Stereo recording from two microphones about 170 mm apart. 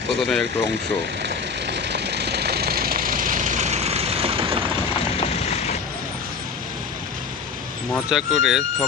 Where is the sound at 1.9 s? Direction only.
75° right (ahead or behind); by 4.6 s 35° right (ahead or behind).